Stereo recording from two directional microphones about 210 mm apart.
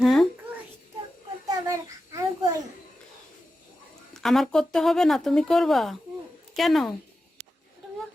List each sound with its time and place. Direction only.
0.0 s a sound: centre (ahead or behind)
1.5 s child singing: 15° right (ahead or behind)
4.1 s speech: centre (ahead or behind)